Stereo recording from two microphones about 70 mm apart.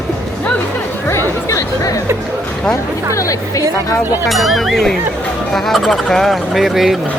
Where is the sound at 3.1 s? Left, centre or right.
Left.